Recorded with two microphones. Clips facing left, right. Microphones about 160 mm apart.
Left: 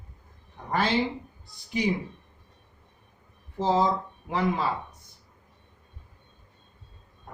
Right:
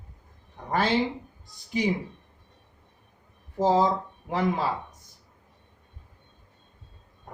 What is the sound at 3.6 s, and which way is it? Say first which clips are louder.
Speech: right 3 dB; 40° right (ahead or behind).